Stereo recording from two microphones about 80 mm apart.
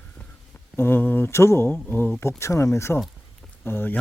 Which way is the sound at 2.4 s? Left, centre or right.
Left.